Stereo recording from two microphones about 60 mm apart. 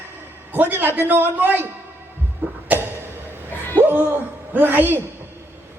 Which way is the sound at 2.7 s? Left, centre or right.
Right.